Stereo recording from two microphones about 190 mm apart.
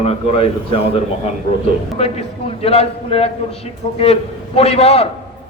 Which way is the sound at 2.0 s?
30° left (ahead or behind).